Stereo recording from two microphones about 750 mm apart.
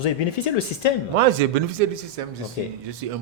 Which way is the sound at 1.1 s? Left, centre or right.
Right.